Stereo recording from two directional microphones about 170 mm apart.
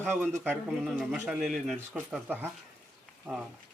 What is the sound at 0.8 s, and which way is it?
Speech, 5° left (ahead or behind).